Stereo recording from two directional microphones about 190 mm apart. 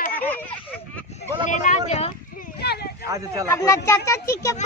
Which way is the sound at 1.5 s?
40° left (ahead or behind).